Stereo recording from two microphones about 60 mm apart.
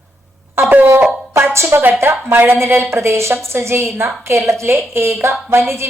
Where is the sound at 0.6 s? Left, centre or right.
Right.